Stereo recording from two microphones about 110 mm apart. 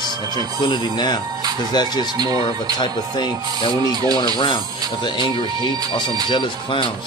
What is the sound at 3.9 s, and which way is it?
Speech, 35° right (ahead or behind).